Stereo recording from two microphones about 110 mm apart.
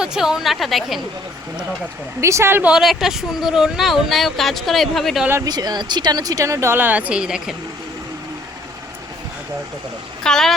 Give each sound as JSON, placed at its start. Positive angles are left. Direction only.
{"t": 0.0, "sound": "speech", "side_deg": -5}
{"t": 2.2, "sound": "speech", "side_deg": -25}
{"t": 2.7, "sound": "speech", "side_deg": 0}
{"t": 5.5, "sound": "speech", "side_deg": -40}
{"t": 10.2, "sound": "speech", "side_deg": 5}